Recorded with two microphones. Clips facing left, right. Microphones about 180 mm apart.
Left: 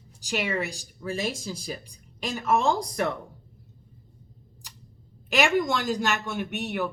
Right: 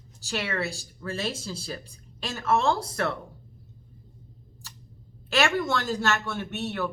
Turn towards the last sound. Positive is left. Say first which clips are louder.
# left 1 dB
turn(degrees=15)  # may be behind; listen again after turning